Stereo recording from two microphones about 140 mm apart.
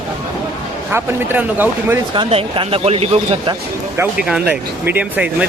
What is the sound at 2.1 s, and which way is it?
Speech, 40° right (ahead or behind).